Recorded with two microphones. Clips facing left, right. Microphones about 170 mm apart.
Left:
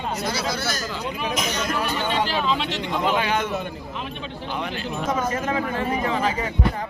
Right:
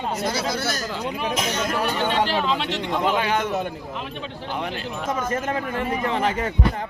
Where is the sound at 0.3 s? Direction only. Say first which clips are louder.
Right 1 dB; 55° right (ahead or behind).